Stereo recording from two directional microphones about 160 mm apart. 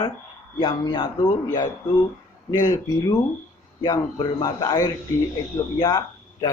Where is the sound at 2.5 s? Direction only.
25° left (ahead or behind).